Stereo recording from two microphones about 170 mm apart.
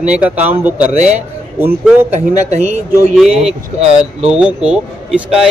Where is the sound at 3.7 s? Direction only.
40° right (ahead or behind).